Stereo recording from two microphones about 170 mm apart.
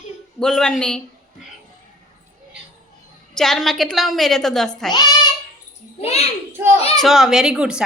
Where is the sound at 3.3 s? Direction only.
Centre (ahead or behind).